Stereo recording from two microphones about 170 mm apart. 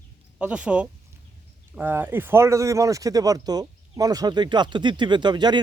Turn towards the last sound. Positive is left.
turn(degrees=-25)  # may be behind; listen again after turning